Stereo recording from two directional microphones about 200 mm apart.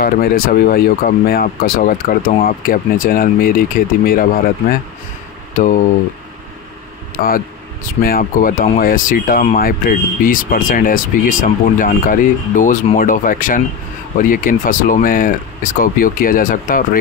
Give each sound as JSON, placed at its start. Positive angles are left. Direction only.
{"t": 0.0, "sound": "speech", "side_deg": 45}
{"t": 7.2, "sound": "speech", "side_deg": 45}